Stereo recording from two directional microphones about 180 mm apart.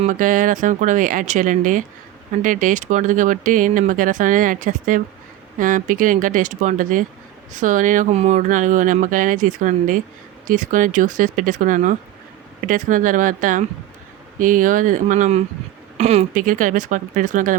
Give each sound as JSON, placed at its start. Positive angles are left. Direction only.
{"t": 0.0, "sound": "speech", "side_deg": -45}